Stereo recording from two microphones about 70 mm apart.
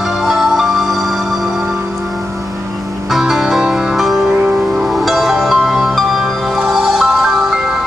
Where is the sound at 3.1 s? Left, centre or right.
Centre.